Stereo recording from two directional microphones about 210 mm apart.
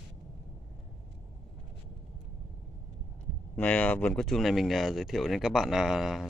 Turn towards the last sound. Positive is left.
turn(degrees=0)  # may be behind; listen again after turning